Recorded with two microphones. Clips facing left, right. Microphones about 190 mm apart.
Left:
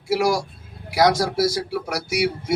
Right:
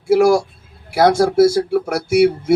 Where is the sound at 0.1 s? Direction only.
55° right (ahead or behind).